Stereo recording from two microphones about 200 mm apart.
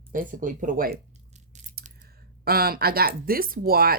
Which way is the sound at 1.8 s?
50° right (ahead or behind).